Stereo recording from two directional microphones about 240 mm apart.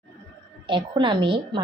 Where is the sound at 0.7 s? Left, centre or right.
Centre.